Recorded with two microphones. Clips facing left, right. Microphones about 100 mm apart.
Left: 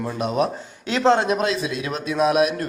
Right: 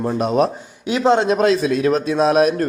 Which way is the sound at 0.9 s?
15° right (ahead or behind).